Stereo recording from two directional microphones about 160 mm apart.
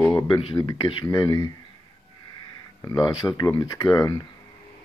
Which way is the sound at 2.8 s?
25° left (ahead or behind).